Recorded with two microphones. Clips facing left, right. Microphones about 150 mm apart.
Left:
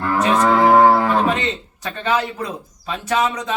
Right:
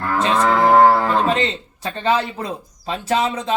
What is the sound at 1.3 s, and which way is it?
A man's voice, 30° right (ahead or behind).